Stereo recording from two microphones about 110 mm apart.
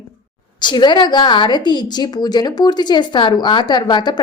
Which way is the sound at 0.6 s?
45° left (ahead or behind).